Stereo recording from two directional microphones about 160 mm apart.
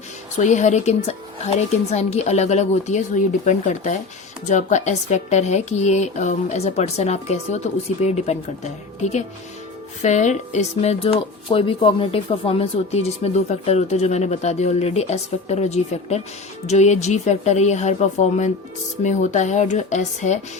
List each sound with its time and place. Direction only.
0.3 s speech: 50° left (ahead or behind)
10.0 s speech: 45° left (ahead or behind)